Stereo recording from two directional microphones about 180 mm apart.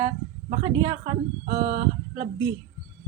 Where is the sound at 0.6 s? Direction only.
30° right (ahead or behind).